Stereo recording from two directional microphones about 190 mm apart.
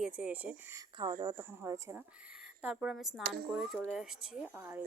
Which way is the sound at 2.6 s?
5° right (ahead or behind).